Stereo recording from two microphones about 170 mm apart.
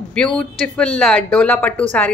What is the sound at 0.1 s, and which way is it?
A woman's voice, 5° left (ahead or behind).